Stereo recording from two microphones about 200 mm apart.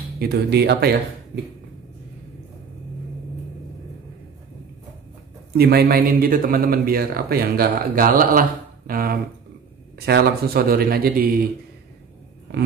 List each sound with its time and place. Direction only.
0.2 s speech: 55° right (ahead or behind)
5.6 s speech: 50° right (ahead or behind)